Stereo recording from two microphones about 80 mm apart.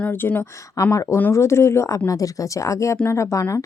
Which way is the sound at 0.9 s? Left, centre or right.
Left.